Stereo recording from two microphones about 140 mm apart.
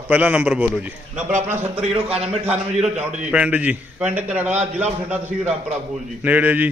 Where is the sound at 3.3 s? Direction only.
10° right (ahead or behind).